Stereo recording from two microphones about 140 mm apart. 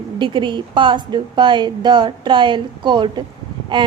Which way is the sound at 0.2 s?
35° right (ahead or behind).